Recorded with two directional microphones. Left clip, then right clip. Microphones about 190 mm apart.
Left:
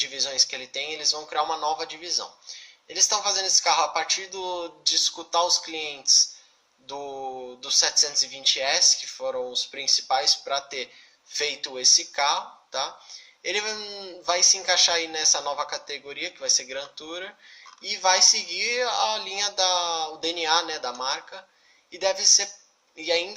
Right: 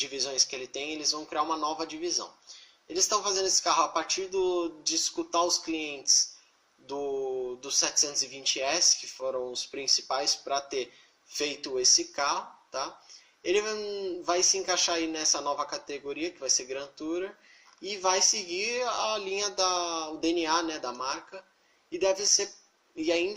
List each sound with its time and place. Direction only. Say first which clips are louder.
0.0 s speech: left 5 dB; 30° right (ahead or behind)
7.6 s speech: left 7 dB; 30° right (ahead or behind)
11.3 s speech: left 4 dB; 25° right (ahead or behind)